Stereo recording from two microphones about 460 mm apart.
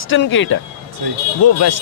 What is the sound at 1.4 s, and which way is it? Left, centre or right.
Speech, left.